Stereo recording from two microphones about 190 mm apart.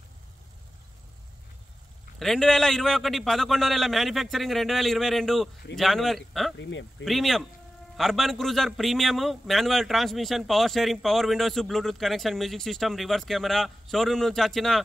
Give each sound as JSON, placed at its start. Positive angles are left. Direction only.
{"t": 2.1, "sound": "a man's voice", "side_deg": 0}
{"t": 6.6, "sound": "speech", "side_deg": 75}
{"t": 7.1, "sound": "a man's voice", "side_deg": 0}